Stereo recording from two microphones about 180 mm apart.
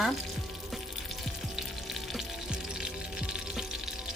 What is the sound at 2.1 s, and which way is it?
Music, 5° right (ahead or behind).